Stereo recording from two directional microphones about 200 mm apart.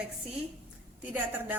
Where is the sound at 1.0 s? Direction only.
10° right (ahead or behind).